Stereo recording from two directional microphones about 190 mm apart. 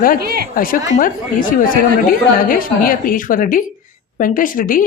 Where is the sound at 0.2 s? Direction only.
55° right (ahead or behind).